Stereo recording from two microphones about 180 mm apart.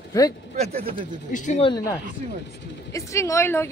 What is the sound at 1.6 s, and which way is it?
Speech, 20° left (ahead or behind).